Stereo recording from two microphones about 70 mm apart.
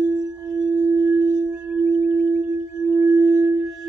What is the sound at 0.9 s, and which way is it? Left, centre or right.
Singing bowl, right.